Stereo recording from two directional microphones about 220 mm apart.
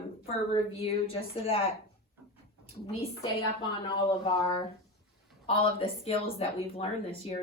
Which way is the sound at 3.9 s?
25° left (ahead or behind).